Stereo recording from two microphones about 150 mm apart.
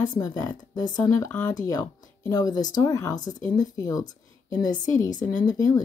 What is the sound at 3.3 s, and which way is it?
Speech, 55° left (ahead or behind).